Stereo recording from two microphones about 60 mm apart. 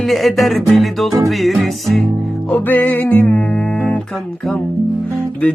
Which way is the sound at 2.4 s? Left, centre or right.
Left.